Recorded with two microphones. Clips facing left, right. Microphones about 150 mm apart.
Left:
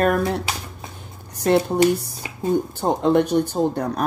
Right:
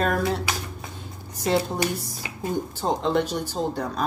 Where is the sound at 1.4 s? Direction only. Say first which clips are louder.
Left 5 dB; 60° left (ahead or behind).